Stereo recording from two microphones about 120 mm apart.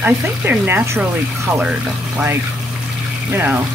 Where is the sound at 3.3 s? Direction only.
15° right (ahead or behind).